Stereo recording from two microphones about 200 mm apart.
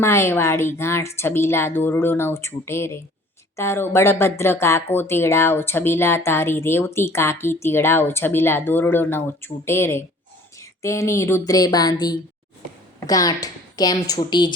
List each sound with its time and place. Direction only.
0.0 s speech: 15° left (ahead or behind)